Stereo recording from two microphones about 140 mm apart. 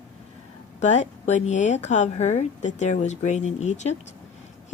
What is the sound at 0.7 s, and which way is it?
Speech, 55° left (ahead or behind).